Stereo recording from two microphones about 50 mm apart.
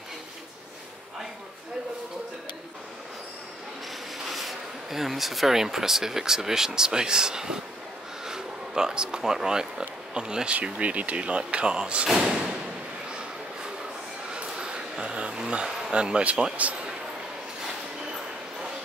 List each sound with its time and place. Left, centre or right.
4.3 s speech: centre
12.2 s thump: centre
14.3 s a sound: centre